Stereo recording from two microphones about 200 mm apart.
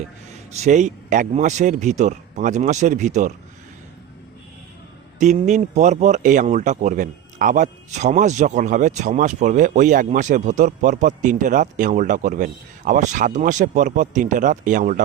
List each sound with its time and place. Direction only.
0.5 s speech: 35° right (ahead or behind)
5.2 s speech: 35° right (ahead or behind)